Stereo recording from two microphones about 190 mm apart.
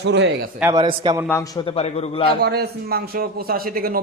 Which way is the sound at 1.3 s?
10° left (ahead or behind).